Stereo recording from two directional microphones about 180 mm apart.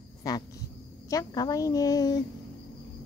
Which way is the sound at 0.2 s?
20° left (ahead or behind).